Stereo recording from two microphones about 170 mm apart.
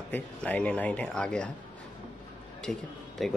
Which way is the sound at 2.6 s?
Centre (ahead or behind).